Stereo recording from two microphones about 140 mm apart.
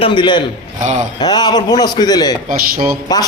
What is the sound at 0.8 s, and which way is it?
Speech, 60° right (ahead or behind).